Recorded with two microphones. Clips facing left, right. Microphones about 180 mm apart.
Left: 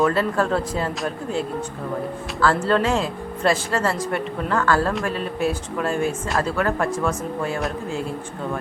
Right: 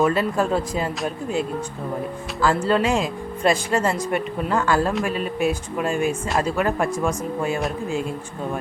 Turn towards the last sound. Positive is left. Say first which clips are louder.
# right 1 dB
turn(degrees=-15)  # may be behind; listen again after turning